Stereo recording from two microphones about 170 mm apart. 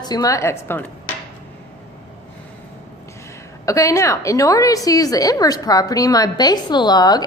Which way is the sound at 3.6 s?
20° left (ahead or behind).